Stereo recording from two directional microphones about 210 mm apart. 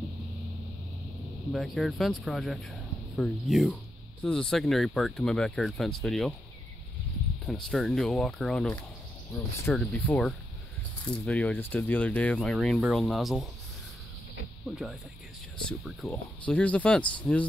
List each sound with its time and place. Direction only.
1.5 s speech: centre (ahead or behind)
7.4 s speech: centre (ahead or behind)
14.7 s speech: centre (ahead or behind)